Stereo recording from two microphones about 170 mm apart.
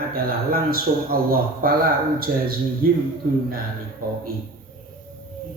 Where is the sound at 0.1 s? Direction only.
60° right (ahead or behind).